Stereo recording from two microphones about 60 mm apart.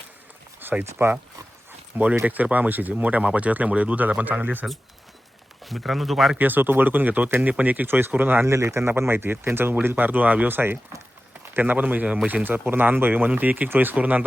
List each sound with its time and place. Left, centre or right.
0.6 s a sound: right
0.9 s speech: right
2.2 s speech: right
5.6 s speech: centre
6.4 s speech: right
8.4 s speech: right